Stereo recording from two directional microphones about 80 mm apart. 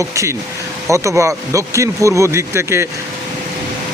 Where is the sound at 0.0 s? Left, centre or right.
Right.